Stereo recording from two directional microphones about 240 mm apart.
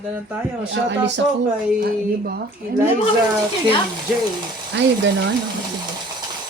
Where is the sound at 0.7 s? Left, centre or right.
Right.